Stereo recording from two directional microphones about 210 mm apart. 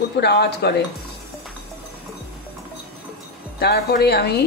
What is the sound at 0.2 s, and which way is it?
Speech, 55° left (ahead or behind).